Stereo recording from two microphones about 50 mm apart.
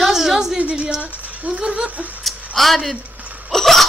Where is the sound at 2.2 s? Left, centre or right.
Centre.